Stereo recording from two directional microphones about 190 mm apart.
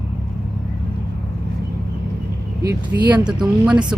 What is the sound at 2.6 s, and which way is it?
Speech, 15° right (ahead or behind).